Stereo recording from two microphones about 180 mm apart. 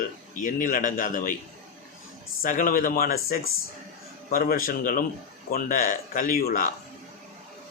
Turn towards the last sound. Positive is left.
turn(degrees=55)  # may be behind; listen again after turning